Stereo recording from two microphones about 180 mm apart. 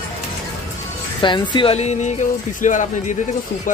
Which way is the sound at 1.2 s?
25° left (ahead or behind).